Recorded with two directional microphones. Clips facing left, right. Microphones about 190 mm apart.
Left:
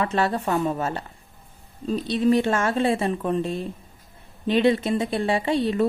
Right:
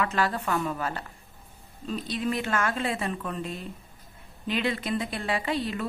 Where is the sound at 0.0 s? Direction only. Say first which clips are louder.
Left 4 dB; 25° left (ahead or behind).